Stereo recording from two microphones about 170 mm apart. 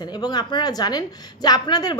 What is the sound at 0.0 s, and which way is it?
A woman's voice, 25° left (ahead or behind).